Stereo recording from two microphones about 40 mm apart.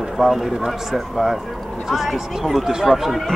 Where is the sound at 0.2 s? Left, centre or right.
Centre.